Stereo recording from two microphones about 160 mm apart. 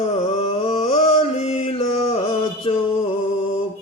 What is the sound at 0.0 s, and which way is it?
Music, 40° left (ahead or behind).